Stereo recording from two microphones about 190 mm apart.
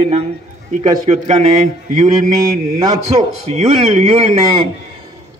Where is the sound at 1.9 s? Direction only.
40° right (ahead or behind).